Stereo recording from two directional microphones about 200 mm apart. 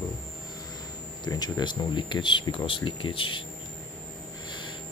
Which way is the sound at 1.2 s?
20° left (ahead or behind).